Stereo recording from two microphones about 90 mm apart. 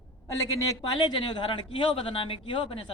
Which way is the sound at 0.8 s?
55° left (ahead or behind).